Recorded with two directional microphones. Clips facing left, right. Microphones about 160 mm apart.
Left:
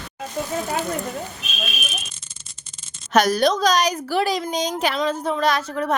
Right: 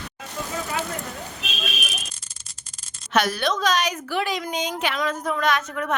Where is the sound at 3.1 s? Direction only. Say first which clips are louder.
Left 5 dB; 40° left (ahead or behind).